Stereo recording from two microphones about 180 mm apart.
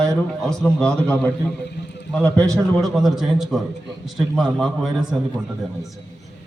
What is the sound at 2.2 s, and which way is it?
Speech, 15° right (ahead or behind).